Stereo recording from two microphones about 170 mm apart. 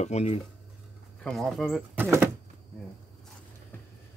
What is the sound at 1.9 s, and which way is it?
Speech, 10° right (ahead or behind).